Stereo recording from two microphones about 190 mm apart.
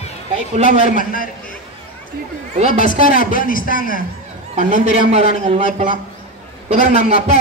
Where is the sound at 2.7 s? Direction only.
45° left (ahead or behind).